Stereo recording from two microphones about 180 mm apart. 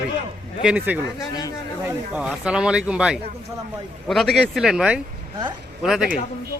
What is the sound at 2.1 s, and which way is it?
Speech, 5° right (ahead or behind).